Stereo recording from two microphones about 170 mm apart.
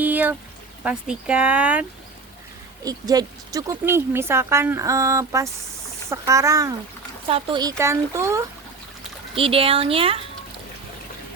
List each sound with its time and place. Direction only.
0.0 s a sound: 10° right (ahead or behind)
0.9 s speech: 5° right (ahead or behind)
2.8 s speech: 20° right (ahead or behind)
7.3 s speech: 35° right (ahead or behind)
7.6 s speech: 20° right (ahead or behind)
9.3 s speech: 35° right (ahead or behind)